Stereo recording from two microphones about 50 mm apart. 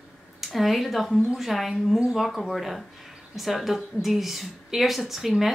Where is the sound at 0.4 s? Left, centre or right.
Centre.